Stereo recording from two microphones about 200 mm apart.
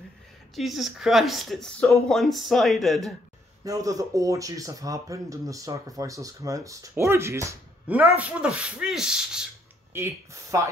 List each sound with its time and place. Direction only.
0.6 s speech: centre (ahead or behind)
3.6 s speech: 15° right (ahead or behind)
9.9 s speech: 15° right (ahead or behind)